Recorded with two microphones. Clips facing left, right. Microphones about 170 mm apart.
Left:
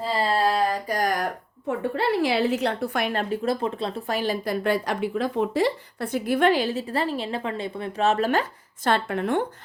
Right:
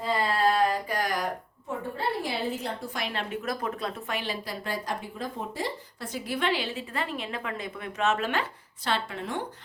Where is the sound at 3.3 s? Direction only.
30° left (ahead or behind).